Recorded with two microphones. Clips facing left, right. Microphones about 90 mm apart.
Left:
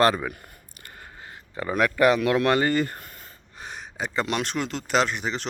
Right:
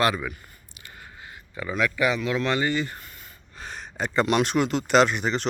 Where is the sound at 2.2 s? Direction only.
60° left (ahead or behind).